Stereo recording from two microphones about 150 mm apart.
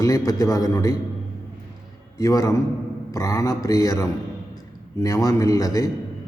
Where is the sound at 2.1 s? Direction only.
25° left (ahead or behind).